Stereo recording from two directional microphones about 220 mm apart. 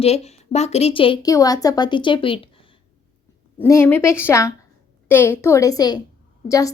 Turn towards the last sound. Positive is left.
turn(degrees=15)  # may be behind; listen again after turning